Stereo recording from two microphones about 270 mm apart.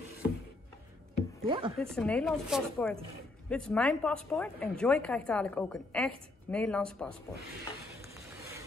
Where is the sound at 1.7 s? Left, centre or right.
Centre.